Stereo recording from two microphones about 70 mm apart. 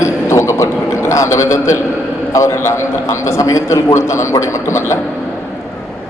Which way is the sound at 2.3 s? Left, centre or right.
Left.